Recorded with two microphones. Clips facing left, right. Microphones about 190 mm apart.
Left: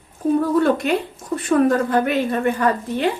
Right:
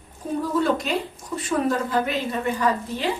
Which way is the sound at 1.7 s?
60° left (ahead or behind).